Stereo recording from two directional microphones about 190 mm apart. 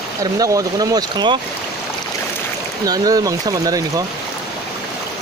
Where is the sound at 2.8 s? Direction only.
20° right (ahead or behind).